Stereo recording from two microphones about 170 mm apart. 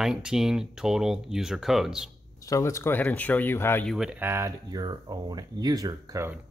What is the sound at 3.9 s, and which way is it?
Speech, 5° right (ahead or behind).